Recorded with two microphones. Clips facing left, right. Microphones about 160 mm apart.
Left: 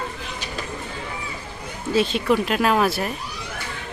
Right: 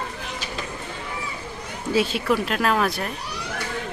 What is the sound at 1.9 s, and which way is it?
Speech, 10° right (ahead or behind).